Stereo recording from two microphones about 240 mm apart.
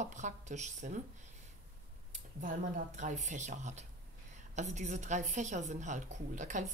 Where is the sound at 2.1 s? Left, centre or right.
Right.